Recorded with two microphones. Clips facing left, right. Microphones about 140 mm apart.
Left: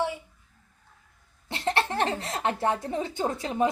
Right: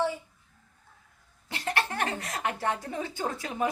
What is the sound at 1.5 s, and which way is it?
Speech, 25° left (ahead or behind).